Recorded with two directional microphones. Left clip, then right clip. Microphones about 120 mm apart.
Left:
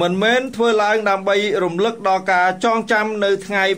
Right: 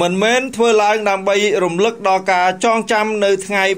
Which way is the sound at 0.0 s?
35° right (ahead or behind).